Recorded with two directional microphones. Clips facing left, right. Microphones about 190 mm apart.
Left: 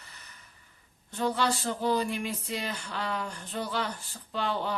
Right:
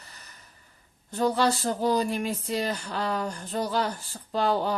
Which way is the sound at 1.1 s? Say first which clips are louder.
Right 4 dB; 40° right (ahead or behind).